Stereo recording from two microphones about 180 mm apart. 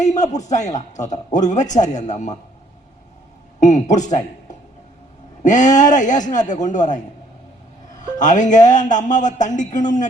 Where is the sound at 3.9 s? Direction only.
40° left (ahead or behind).